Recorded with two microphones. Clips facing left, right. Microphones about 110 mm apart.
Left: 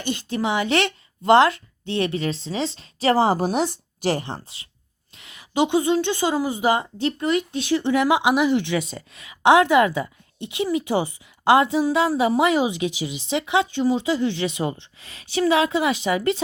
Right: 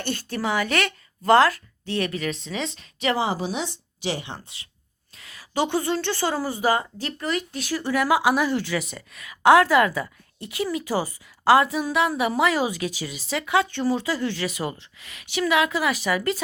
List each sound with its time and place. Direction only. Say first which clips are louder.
0.0 s a woman's voice: left 3 dB; 15° left (ahead or behind); by 4.4 s 45° left (ahead or behind)
5.1 s a woman's voice: left 3 dB; 20° left (ahead or behind)